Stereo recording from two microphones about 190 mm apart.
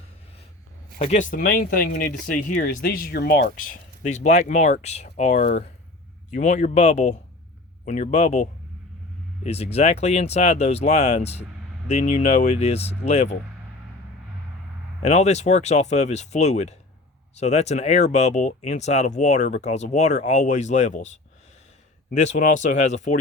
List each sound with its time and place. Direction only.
0.9 s speech: 35° left (ahead or behind)
15.0 s speech: 35° left (ahead or behind)